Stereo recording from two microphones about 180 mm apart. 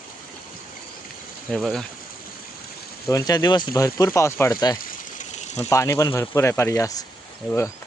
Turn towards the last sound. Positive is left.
turn(degrees=15)  # may be behind; listen again after turning